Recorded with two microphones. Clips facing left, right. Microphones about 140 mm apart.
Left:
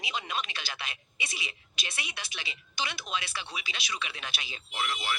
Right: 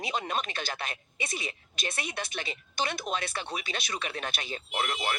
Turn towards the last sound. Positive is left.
turn(degrees=-50)  # may be behind; listen again after turning